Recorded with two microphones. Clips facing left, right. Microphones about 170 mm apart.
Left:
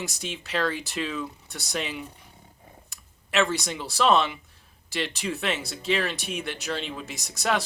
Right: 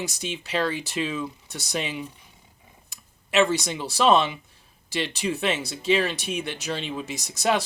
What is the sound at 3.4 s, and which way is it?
Speech, 20° right (ahead or behind).